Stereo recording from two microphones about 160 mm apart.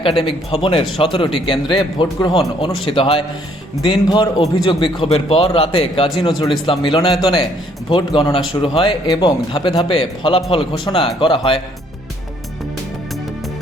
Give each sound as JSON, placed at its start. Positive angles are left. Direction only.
{"t": 0.2, "sound": "a man's voice", "side_deg": 35}